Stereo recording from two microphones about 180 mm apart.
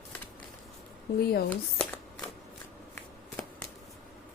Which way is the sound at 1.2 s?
60° left (ahead or behind).